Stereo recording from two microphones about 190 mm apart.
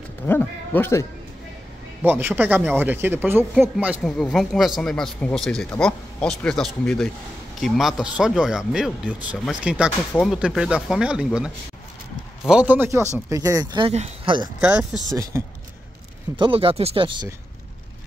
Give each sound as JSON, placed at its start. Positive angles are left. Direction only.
{"t": 0.3, "sound": "a man's voice", "side_deg": 10}
{"t": 2.0, "sound": "speech", "side_deg": -10}
{"t": 14.6, "sound": "speech", "side_deg": -5}
{"t": 16.3, "sound": "speech", "side_deg": -25}